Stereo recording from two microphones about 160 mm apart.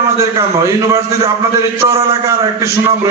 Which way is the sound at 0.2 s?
20° right (ahead or behind).